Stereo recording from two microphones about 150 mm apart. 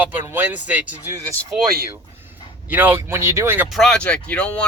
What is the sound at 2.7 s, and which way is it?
Speech, 10° right (ahead or behind).